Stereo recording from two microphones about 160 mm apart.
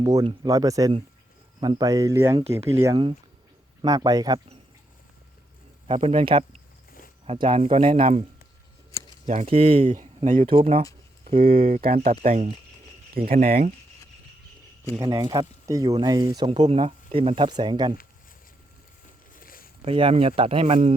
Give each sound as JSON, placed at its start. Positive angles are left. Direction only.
{"t": 0.0, "sound": "speech", "side_deg": -20}
{"t": 5.9, "sound": "speech", "side_deg": -35}
{"t": 9.2, "sound": "speech", "side_deg": -45}
{"t": 10.2, "sound": "speech", "side_deg": -50}
{"t": 10.4, "sound": "speech", "side_deg": -35}
{"t": 11.3, "sound": "speech", "side_deg": -65}
{"t": 11.9, "sound": "speech", "side_deg": -50}
{"t": 13.1, "sound": "speech", "side_deg": -65}
{"t": 15.1, "sound": "speech", "side_deg": -25}
{"t": 16.5, "sound": "speech", "side_deg": -35}
{"t": 19.3, "sound": "a sound", "side_deg": 60}
{"t": 19.8, "sound": "speech", "side_deg": -35}